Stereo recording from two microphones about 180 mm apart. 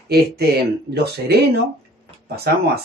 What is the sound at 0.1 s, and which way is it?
Speech, 65° right (ahead or behind).